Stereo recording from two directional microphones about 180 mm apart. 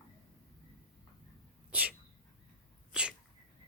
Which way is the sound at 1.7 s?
10° right (ahead or behind).